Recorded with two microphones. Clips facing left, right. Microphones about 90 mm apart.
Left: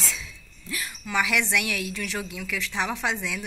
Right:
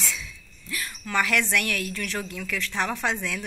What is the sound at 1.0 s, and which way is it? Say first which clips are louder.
A woman's voice: right 1 dB; 10° left (ahead or behind).